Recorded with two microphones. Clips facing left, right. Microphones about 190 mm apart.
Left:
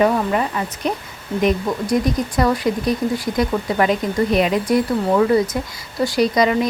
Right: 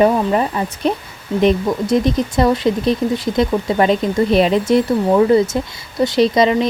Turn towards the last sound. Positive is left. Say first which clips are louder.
# right 3 dB
turn(degrees=-25)  # may be behind; listen again after turning